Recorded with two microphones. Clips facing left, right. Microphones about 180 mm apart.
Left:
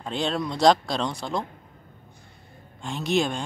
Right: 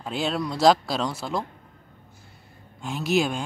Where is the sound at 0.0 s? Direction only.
5° right (ahead or behind).